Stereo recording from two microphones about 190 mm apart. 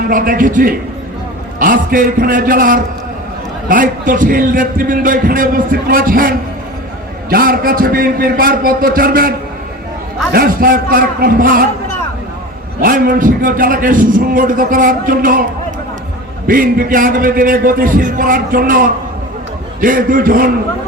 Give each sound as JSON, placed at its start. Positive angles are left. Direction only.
{"t": 0.1, "sound": "a man's voice", "side_deg": -45}
{"t": 10.3, "sound": "a man's voice", "side_deg": -50}
{"t": 12.8, "sound": "a man's voice", "side_deg": -45}
{"t": 16.5, "sound": "a man's voice", "side_deg": -45}